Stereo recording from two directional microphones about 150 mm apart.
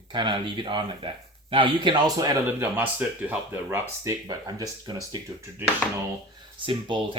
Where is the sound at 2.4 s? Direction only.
10° right (ahead or behind).